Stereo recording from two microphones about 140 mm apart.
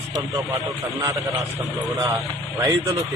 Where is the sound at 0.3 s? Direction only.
20° right (ahead or behind).